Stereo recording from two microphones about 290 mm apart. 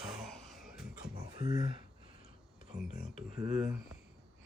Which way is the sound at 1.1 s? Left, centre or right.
Centre.